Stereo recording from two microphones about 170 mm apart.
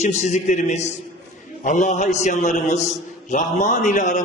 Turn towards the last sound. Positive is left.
turn(degrees=45)  # may be behind; listen again after turning